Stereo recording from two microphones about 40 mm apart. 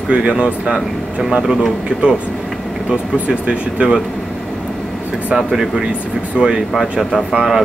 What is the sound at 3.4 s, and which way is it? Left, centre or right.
Speech, right.